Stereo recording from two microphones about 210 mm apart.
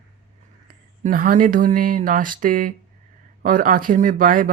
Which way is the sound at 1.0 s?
40° right (ahead or behind).